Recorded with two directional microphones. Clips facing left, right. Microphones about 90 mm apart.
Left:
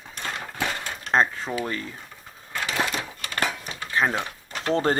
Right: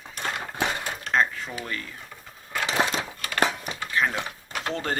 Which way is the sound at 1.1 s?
35° left (ahead or behind).